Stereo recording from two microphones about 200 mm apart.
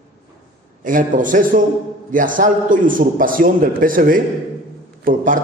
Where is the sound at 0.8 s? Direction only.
40° right (ahead or behind).